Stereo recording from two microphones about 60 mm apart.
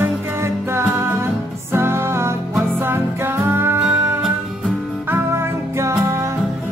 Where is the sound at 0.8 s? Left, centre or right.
Right.